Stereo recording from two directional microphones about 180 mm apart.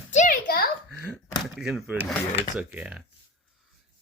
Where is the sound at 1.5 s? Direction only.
Centre (ahead or behind).